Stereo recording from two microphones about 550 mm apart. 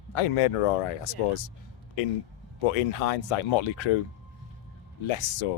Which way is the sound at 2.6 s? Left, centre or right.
Left.